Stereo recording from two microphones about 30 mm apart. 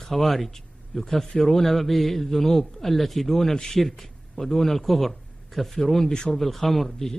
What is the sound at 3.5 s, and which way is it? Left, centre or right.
A man's voice, left.